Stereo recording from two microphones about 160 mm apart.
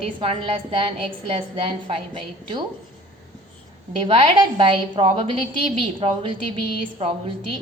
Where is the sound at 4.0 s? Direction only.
35° right (ahead or behind).